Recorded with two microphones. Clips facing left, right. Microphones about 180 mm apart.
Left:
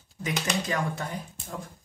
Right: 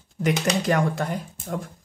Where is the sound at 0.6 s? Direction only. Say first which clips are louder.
Right 7 dB; 70° right (ahead or behind).